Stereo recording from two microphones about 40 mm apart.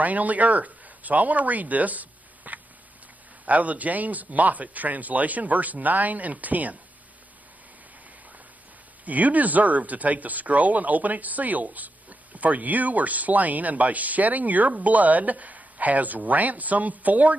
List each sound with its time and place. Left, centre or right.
0.0 s speech: right
9.0 s speech: right